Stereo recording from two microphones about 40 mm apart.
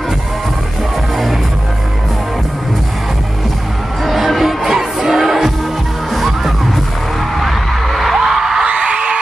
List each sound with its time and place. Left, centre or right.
4.0 s music: centre
8.6 s music: right